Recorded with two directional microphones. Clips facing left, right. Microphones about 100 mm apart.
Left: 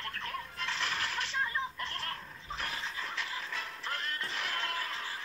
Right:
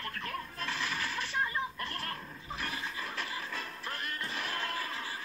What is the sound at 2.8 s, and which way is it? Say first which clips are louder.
Music: right 1 dB; 10° right (ahead or behind).